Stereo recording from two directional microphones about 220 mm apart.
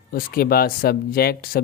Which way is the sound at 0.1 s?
40° left (ahead or behind).